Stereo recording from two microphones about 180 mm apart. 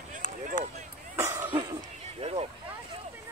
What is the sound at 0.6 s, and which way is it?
Speech, 45° left (ahead or behind).